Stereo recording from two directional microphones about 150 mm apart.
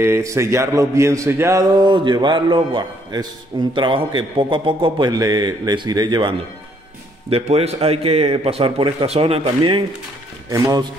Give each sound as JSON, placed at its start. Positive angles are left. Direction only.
{"t": 0.0, "sound": "a man's voice", "side_deg": -20}
{"t": 7.2, "sound": "a man's voice", "side_deg": -40}
{"t": 10.5, "sound": "speech", "side_deg": -25}